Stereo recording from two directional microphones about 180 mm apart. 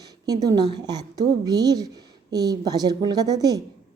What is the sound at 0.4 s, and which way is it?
A woman's voice, 25° right (ahead or behind).